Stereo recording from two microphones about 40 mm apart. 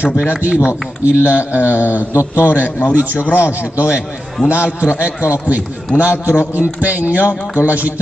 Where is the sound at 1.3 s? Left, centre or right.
Left.